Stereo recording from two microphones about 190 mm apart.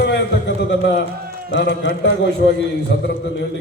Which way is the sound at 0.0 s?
60° left (ahead or behind).